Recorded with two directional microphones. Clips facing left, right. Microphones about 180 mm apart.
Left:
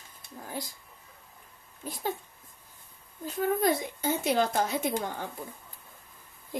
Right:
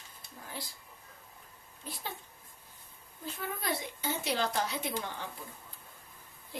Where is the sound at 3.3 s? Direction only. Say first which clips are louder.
Left 10 dB; 45° left (ahead or behind).